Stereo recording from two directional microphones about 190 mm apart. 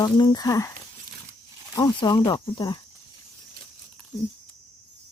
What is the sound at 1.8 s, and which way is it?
Speech, 20° left (ahead or behind).